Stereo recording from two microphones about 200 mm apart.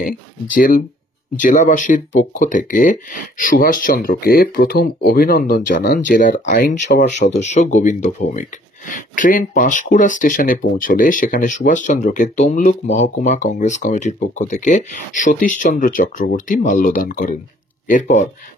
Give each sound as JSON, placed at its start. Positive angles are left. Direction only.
{"t": 0.6, "sound": "speech", "side_deg": 45}